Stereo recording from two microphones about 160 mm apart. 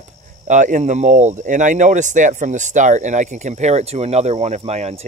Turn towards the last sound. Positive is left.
turn(degrees=-45)  # may be behind; listen again after turning